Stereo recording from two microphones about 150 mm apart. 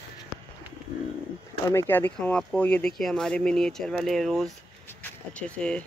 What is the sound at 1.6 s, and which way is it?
Speech, 15° left (ahead or behind).